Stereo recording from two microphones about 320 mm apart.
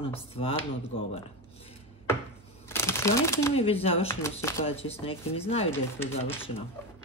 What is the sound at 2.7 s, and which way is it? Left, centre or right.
Speech, centre.